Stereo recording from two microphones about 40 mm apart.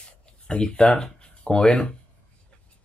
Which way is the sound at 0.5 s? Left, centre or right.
Left.